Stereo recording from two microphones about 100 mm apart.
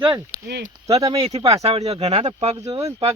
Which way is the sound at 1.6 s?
90° right.